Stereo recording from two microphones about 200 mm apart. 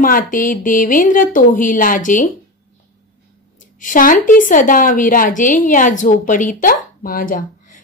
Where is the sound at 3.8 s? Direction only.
40° left (ahead or behind).